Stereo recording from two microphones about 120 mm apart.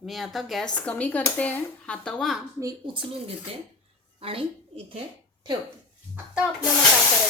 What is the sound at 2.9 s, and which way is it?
A woman's voice, 45° right (ahead or behind).